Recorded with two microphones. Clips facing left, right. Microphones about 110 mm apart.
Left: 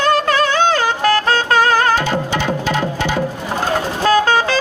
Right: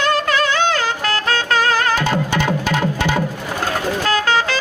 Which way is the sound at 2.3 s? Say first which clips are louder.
Even; 50° right (ahead or behind).